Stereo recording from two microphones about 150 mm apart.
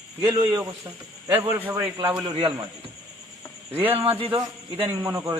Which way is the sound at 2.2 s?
30° right (ahead or behind).